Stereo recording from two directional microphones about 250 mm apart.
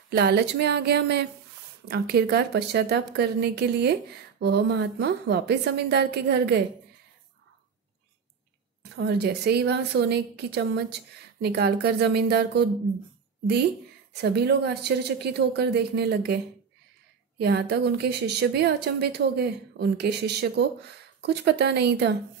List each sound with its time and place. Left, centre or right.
0.1 s a woman's voice: right
8.9 s a woman's voice: right
14.2 s a woman's voice: right
17.4 s a woman's voice: right